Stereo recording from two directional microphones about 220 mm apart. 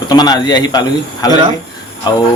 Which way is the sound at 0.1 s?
20° left (ahead or behind).